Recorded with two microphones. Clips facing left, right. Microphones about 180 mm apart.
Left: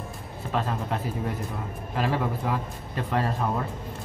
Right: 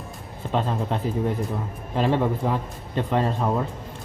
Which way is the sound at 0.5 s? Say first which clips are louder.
Right 3 dB; 20° right (ahead or behind).